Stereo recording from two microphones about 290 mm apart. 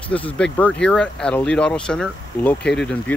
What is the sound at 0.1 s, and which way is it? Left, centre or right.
Speech, centre.